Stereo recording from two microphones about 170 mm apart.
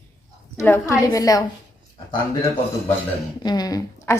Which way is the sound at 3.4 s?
25° left (ahead or behind).